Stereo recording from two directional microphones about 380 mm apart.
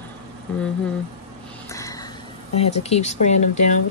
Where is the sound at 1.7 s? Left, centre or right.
Centre.